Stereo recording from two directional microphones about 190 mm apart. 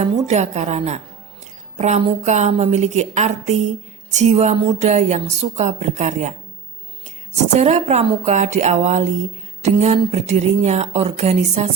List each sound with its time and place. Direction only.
0.0 s speech: 35° right (ahead or behind)
7.3 s speech: 35° right (ahead or behind)